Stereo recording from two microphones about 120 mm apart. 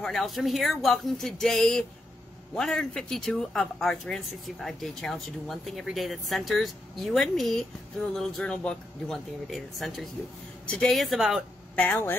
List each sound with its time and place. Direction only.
0.0 s a woman's voice: centre (ahead or behind)
11.7 s speech: 15° left (ahead or behind)